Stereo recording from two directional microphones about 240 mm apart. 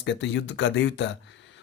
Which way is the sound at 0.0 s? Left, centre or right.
Left.